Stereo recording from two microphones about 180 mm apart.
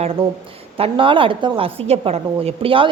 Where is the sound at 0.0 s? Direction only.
30° right (ahead or behind).